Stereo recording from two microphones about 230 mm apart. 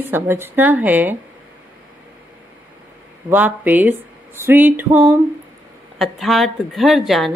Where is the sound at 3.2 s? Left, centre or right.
Centre.